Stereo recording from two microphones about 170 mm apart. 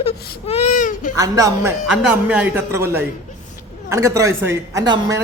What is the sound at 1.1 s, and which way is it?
Speech, 20° right (ahead or behind).